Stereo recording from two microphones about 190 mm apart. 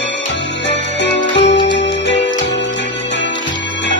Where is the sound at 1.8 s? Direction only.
70° left (ahead or behind).